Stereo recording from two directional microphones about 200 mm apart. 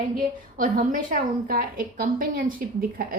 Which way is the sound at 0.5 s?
40° right (ahead or behind).